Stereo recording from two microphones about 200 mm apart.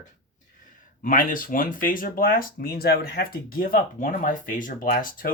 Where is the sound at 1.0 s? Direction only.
45° left (ahead or behind).